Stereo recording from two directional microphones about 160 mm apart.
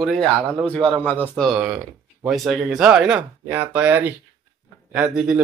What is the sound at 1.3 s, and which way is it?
A man's voice, 5° left (ahead or behind).